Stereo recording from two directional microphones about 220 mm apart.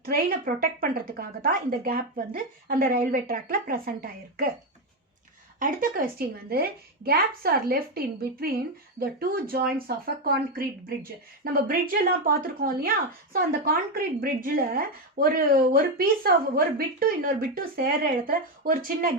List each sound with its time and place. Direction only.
0.0 s speech: 40° right (ahead or behind)
5.5 s a woman's voice: 40° right (ahead or behind)